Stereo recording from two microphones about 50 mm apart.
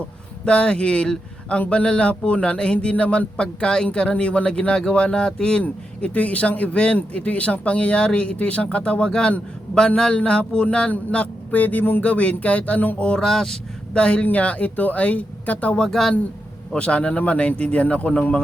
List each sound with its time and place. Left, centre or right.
0.4 s speech: centre
5.6 s speech: left
11.5 s a sound: left
13.0 s speech: left
13.2 s speech: centre
13.9 s speech: left
15.9 s speech: centre
16.7 s speech: left